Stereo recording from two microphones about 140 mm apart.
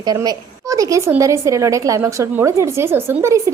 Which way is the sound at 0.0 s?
30° right (ahead or behind).